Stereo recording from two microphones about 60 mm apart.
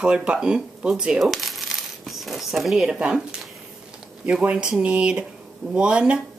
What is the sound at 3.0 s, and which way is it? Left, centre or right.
Speech, centre.